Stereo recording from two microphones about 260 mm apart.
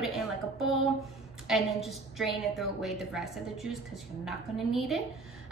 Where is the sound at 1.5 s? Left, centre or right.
Centre.